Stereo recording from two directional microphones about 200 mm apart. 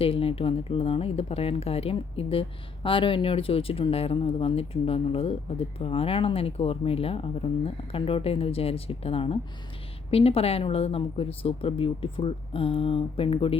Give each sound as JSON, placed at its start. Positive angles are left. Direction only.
{"t": 0.0, "sound": "speech", "side_deg": 30}